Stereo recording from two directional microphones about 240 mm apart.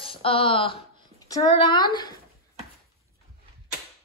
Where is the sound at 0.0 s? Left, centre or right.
Left.